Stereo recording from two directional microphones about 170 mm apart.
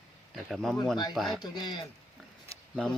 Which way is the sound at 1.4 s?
25° left (ahead or behind).